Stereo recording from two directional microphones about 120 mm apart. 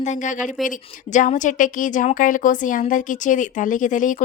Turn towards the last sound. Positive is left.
turn(degrees=90)